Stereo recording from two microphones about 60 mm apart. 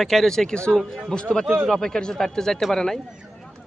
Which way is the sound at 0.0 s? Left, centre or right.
Centre.